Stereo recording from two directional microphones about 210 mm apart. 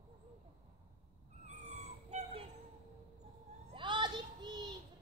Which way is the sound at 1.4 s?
30° right (ahead or behind).